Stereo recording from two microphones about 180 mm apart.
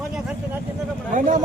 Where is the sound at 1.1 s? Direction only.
45° right (ahead or behind).